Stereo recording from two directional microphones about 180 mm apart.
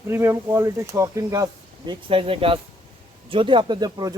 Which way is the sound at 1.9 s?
30° right (ahead or behind).